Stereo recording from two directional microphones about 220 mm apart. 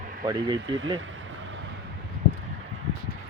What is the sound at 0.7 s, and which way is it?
Speech, 55° right (ahead or behind).